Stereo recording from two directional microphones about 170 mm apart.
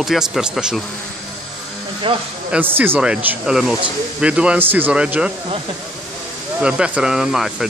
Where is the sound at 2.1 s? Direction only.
30° right (ahead or behind).